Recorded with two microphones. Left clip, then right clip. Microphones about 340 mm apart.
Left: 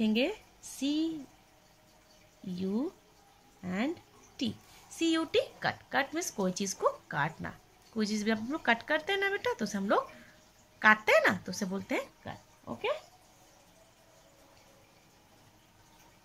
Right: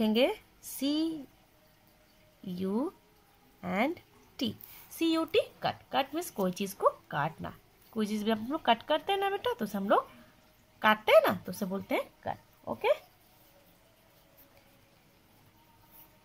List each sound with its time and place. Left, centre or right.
0.0 s speech: centre
2.6 s speech: right
3.6 s a woman's voice: centre